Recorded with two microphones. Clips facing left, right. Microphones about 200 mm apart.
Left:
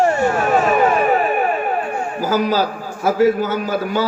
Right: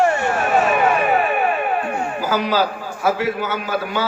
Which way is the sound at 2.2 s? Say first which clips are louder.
Left 3 dB; 40° left (ahead or behind).